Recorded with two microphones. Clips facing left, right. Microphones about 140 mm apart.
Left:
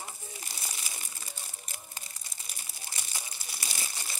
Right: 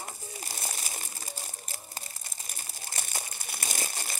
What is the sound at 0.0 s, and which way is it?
Crumpling, 40° right (ahead or behind).